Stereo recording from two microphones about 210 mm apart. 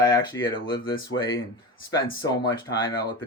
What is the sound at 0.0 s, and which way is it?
Speech, 20° left (ahead or behind).